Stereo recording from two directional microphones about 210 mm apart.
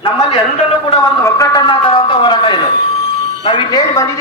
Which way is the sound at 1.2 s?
15° left (ahead or behind).